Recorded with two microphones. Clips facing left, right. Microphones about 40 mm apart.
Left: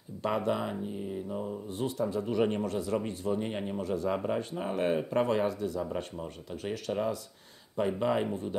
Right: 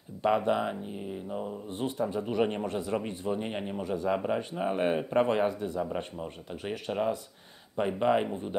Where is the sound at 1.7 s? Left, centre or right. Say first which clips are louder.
Even; right.